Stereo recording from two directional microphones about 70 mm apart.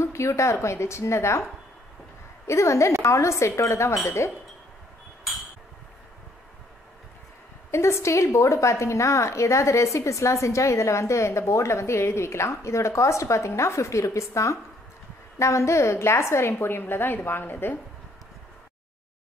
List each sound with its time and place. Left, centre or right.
0.0 s a woman's voice: left
2.4 s a woman's voice: left
7.7 s a woman's voice: left